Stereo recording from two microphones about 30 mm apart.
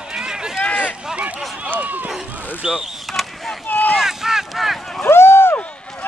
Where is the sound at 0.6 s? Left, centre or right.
Left.